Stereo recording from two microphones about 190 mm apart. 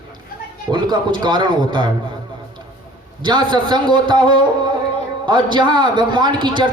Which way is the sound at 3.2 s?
25° right (ahead or behind).